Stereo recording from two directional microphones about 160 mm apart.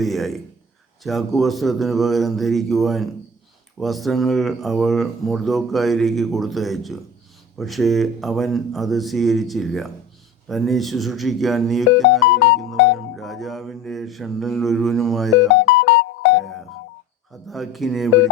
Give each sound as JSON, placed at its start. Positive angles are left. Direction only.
{"t": 0.0, "sound": "a man's voice", "side_deg": 0}
{"t": 13.1, "sound": "mantra", "side_deg": 0}
{"t": 15.6, "sound": "music", "side_deg": 90}
{"t": 17.5, "sound": "speech", "side_deg": 0}